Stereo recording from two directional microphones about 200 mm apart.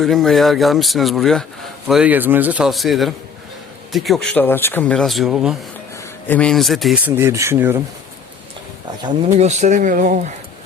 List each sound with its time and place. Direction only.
0.0 s speech: centre (ahead or behind)
9.0 s speech: 20° right (ahead or behind)
9.3 s speech: 35° right (ahead or behind)